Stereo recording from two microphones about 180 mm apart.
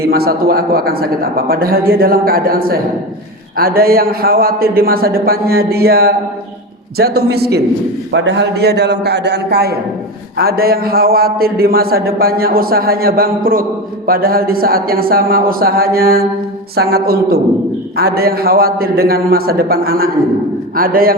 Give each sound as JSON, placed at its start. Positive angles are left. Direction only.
{"t": 0.0, "sound": "a man's voice", "side_deg": -60}
{"t": 8.1, "sound": "a man's voice", "side_deg": -90}